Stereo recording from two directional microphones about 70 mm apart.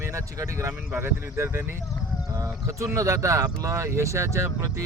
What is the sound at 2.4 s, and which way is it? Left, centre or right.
Speech, right.